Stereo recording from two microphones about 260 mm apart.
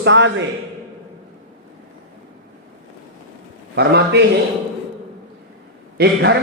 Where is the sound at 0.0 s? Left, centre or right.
Right.